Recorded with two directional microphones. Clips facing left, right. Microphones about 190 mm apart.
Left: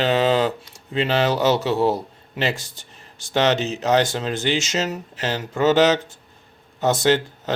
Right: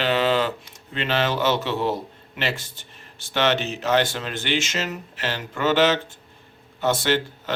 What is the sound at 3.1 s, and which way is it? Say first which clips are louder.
Speech: left 3 dB; 40° left (ahead or behind).